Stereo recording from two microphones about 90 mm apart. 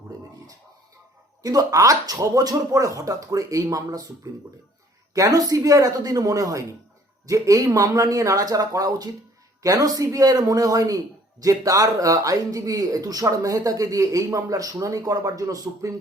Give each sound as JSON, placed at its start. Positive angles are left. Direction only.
{"t": 1.4, "sound": "a man's voice", "side_deg": -40}